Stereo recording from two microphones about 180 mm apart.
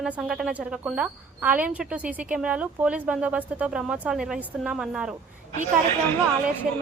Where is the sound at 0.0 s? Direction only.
5° right (ahead or behind).